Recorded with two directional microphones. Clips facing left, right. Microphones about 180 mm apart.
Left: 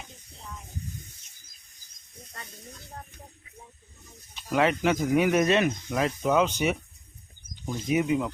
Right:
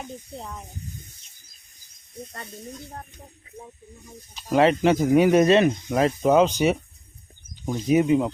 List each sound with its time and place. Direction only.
4.4 s speech: 35° right (ahead or behind)